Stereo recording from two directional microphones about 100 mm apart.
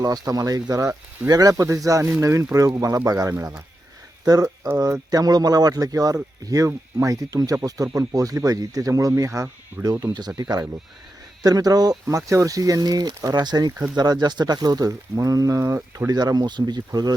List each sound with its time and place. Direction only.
0.0 s speech: 40° right (ahead or behind)
10.0 s speech: 45° right (ahead or behind); by 16.1 s 30° right (ahead or behind)
16.1 s speech: 45° right (ahead or behind)